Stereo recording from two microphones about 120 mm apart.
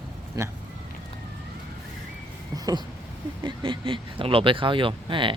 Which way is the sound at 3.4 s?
45° right (ahead or behind).